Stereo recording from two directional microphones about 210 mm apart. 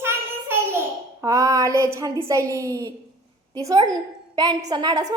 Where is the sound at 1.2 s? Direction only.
15° right (ahead or behind).